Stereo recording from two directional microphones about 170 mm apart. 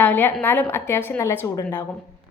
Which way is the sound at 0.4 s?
15° left (ahead or behind).